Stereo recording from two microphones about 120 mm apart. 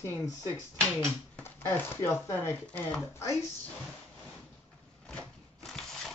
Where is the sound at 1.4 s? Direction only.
20° left (ahead or behind).